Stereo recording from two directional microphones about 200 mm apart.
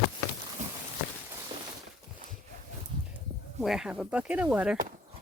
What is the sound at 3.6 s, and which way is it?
Speech, centre (ahead or behind).